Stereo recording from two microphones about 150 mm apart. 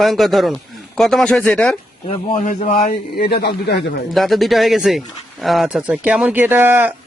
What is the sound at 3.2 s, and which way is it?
Speech, 90° left.